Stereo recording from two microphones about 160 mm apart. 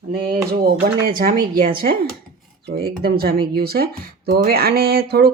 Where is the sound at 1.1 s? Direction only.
65° right (ahead or behind).